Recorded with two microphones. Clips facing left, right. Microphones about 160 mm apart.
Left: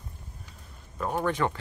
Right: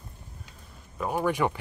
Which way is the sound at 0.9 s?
10° right (ahead or behind).